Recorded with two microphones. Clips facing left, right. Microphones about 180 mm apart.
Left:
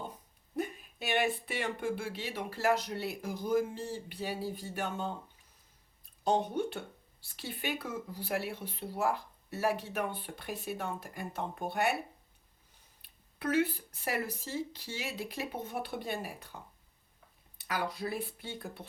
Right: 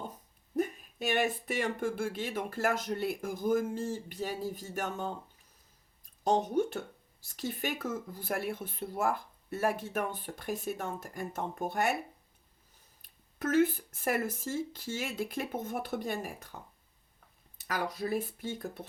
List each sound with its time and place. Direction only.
0.5 s speech: 45° right (ahead or behind)
6.2 s speech: 40° right (ahead or behind)
13.0 s speech: 45° right (ahead or behind)
17.7 s speech: 45° right (ahead or behind)